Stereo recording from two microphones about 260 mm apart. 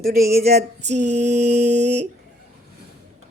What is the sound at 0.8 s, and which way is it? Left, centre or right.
Mantra, right.